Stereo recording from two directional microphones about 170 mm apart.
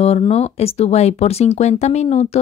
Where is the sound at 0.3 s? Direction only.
35° left (ahead or behind).